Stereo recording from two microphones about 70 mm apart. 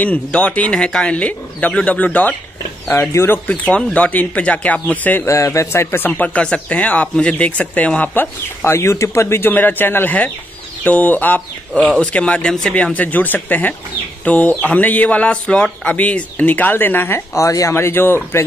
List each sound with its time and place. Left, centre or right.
0.0 s speech: centre
2.9 s speech: left
3.6 s speech: centre
5.2 s speech: left
8.7 s speech: left
9.5 s speech: left
11.8 s speech: centre
12.7 s speech: left
17.3 s speech: left
17.7 s speech: left